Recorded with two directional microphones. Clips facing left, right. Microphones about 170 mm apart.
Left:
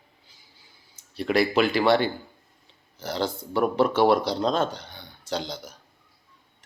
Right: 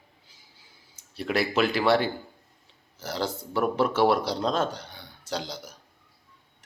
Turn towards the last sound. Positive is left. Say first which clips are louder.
# left 2 dB
turn(degrees=30)  # may be behind; listen again after turning